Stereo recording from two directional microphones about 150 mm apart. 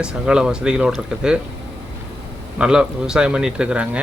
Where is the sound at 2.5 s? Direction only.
5° right (ahead or behind).